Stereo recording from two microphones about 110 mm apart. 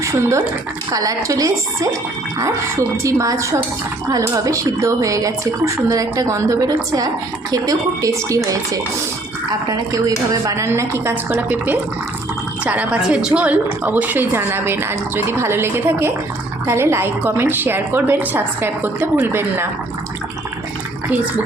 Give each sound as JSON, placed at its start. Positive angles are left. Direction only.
{"t": 0.0, "sound": "a woman's voice", "side_deg": -25}
{"t": 9.6, "sound": "a woman's voice", "side_deg": -30}